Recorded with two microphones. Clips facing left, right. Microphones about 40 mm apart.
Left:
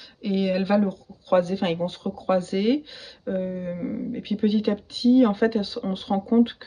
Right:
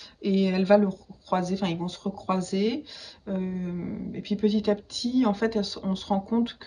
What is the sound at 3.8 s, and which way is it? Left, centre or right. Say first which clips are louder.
Speech: left 4 dB; centre.